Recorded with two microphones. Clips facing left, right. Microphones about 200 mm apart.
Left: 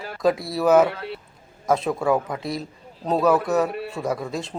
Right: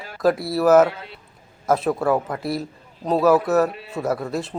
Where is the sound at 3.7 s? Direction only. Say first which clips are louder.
Left 6 dB; 60° left (ahead or behind).